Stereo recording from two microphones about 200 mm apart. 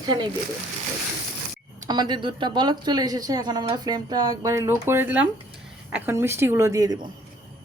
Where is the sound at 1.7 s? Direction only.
20° right (ahead or behind).